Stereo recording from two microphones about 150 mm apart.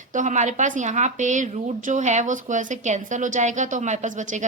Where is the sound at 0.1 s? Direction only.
55° right (ahead or behind).